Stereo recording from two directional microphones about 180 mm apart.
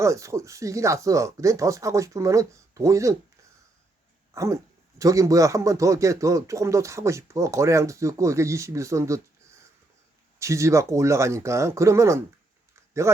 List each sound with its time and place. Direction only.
0.0 s speech: 15° right (ahead or behind)
4.9 s speech: 20° right (ahead or behind)
10.4 s speech: 15° right (ahead or behind)